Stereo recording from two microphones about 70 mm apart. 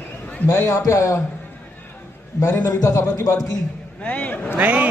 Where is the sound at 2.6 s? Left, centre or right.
Left.